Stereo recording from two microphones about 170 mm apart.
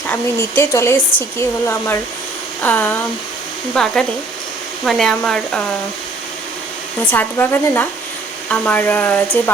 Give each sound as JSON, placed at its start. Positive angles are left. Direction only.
{"t": 0.1, "sound": "speech", "side_deg": 15}
{"t": 7.1, "sound": "speech", "side_deg": 10}